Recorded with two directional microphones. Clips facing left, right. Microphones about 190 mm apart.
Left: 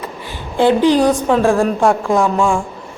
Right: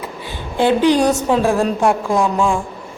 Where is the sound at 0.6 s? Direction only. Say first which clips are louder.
Left 2 dB; 15° right (ahead or behind).